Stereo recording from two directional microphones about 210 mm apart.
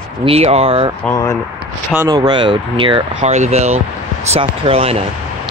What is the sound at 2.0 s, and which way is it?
Speech, 20° right (ahead or behind).